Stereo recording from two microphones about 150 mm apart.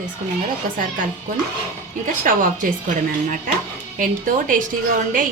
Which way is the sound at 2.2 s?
65° right (ahead or behind).